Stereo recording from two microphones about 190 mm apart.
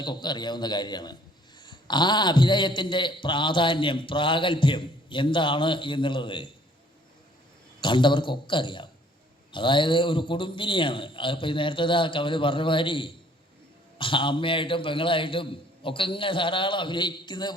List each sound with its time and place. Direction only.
0.0 s a man's voice: 25° left (ahead or behind)
7.8 s a man's voice: 25° left (ahead or behind)